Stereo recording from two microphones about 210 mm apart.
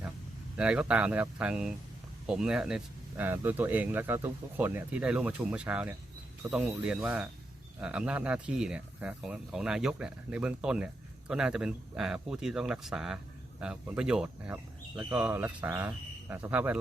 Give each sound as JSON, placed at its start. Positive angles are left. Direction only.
{"t": 0.5, "sound": "speech", "side_deg": -5}